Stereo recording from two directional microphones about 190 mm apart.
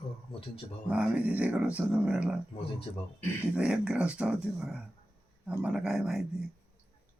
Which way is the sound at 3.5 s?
5° right (ahead or behind).